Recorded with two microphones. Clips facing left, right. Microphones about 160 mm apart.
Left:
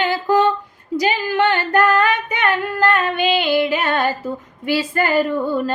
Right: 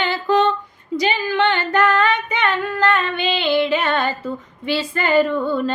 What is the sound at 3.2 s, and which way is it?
Female singing, 40° left (ahead or behind).